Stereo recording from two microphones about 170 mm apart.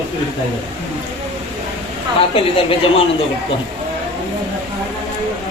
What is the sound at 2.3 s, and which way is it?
Speech, 30° left (ahead or behind).